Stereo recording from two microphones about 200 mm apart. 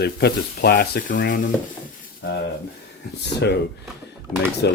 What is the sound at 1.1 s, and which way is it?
Speech, 60° left (ahead or behind).